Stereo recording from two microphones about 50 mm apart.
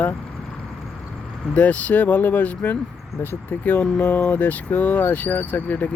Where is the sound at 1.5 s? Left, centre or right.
Left.